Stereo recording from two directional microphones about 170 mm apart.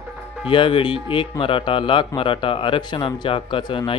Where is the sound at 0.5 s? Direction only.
30° left (ahead or behind).